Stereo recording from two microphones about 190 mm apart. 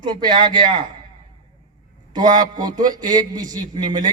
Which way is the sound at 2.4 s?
20° right (ahead or behind).